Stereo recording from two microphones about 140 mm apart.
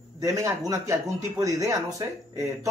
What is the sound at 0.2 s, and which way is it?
Speech, 20° right (ahead or behind).